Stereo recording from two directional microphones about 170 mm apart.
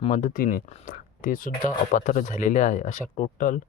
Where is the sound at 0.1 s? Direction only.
50° left (ahead or behind).